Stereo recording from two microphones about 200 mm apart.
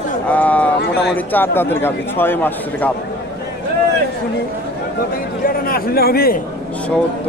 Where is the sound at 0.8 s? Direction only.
60° left (ahead or behind).